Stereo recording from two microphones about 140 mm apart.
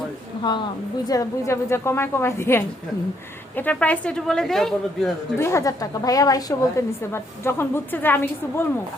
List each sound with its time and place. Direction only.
1.0 s a woman's voice: 25° left (ahead or behind); by 5.1 s centre (ahead or behind)
5.4 s a woman's voice: 20° left (ahead or behind)